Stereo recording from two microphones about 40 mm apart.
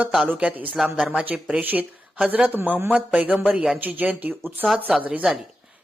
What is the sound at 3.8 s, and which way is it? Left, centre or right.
Speech, right.